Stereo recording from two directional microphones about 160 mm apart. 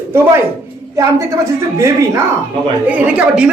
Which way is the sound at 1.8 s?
20° right (ahead or behind).